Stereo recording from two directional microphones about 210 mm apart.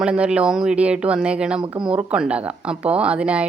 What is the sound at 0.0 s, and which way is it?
Speech, 5° right (ahead or behind).